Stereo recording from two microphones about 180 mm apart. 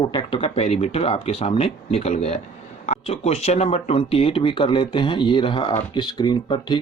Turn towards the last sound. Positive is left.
turn(degrees=25)  # may be behind; listen again after turning